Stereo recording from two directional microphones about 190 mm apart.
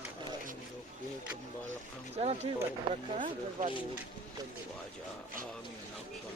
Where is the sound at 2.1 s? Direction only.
35° right (ahead or behind).